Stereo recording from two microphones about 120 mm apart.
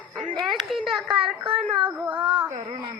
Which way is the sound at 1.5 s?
45° right (ahead or behind).